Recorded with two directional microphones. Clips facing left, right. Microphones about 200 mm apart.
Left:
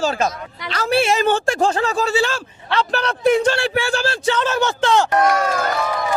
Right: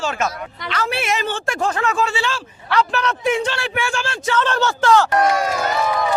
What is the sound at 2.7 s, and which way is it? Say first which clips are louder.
A man's voice: right 1 dB; 30° left (ahead or behind).